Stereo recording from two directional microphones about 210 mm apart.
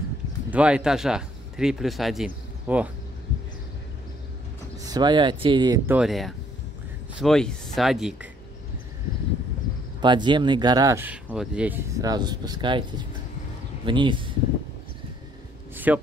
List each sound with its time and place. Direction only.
0.5 s speech: 5° right (ahead or behind)
4.8 s speech: 20° right (ahead or behind)
5.9 s speech: 5° right (ahead or behind)
9.9 s speech: 20° right (ahead or behind)
15.7 s a sound: 10° right (ahead or behind)